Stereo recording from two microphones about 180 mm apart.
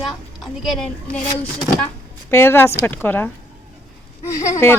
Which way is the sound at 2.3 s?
10° left (ahead or behind).